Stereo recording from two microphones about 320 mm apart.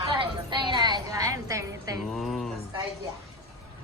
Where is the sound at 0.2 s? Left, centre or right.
Centre.